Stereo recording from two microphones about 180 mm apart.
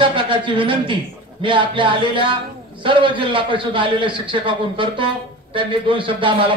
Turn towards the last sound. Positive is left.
turn(degrees=-25)  # may be behind; listen again after turning